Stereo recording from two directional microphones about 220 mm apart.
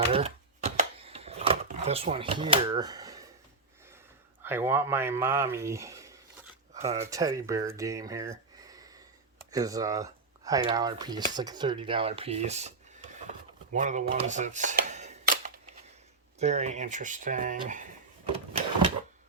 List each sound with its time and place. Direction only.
0.0 s typewriter: 25° right (ahead or behind)
1.6 s speech: 30° right (ahead or behind)
4.4 s speech: 10° right (ahead or behind); by 13.1 s 30° right (ahead or behind)
13.7 s a sound: 35° right (ahead or behind)
16.4 s speech: 30° right (ahead or behind)